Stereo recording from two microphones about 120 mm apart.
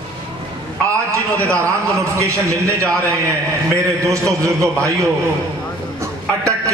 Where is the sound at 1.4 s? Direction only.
25° right (ahead or behind).